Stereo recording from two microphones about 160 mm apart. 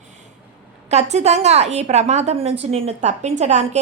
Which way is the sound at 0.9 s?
45° right (ahead or behind).